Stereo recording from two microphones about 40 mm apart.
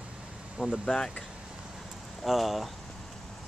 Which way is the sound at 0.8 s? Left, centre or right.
Centre.